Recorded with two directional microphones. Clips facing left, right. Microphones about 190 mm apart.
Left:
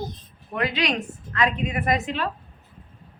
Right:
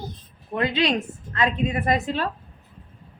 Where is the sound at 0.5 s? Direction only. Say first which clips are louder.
Right 3 dB; 25° right (ahead or behind).